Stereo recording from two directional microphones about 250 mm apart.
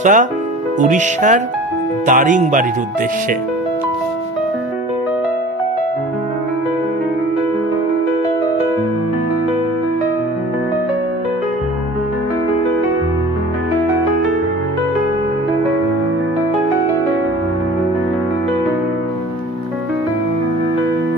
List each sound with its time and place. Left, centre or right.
0.0 s speech: right
0.7 s music: right
2.0 s speech: right